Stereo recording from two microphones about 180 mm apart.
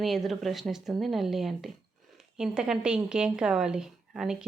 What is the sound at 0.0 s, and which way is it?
Speech, centre (ahead or behind).